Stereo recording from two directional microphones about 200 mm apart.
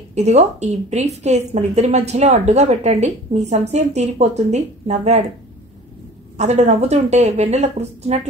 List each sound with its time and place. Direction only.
0.1 s a woman's voice: 35° right (ahead or behind)
6.3 s a woman's voice: 35° right (ahead or behind)